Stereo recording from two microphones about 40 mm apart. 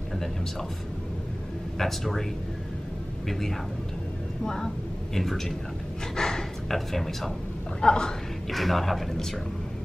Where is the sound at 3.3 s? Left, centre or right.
Centre.